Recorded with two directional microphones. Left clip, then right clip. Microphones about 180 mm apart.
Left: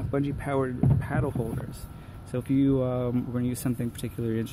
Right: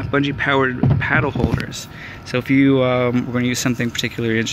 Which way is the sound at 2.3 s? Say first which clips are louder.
Right 10 dB; 5° left (ahead or behind).